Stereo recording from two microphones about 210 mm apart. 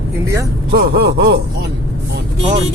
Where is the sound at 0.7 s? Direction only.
50° right (ahead or behind).